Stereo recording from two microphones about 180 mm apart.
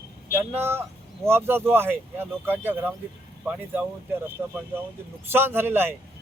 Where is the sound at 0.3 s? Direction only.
15° right (ahead or behind).